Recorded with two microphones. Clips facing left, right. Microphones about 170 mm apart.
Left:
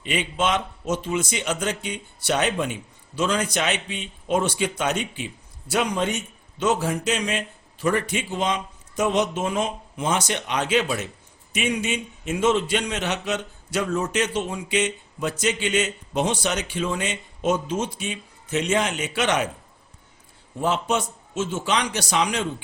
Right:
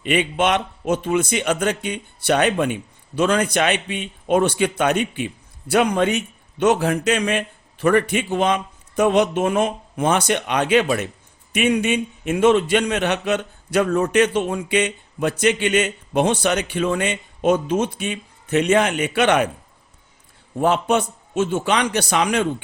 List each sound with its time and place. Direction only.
0.0 s speech: 60° right (ahead or behind)
20.6 s speech: 55° right (ahead or behind)